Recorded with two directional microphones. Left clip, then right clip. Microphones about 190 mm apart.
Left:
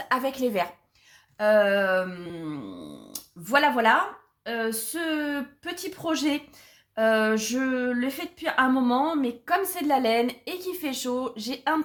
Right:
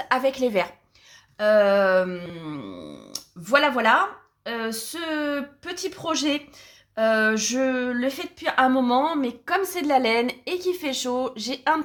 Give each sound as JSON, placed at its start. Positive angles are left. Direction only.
{"t": 0.1, "sound": "speech", "side_deg": -25}